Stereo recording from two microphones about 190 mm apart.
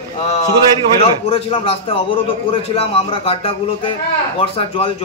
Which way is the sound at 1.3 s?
30° left (ahead or behind).